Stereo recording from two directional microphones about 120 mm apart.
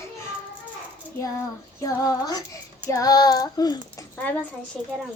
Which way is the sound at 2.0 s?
30° left (ahead or behind).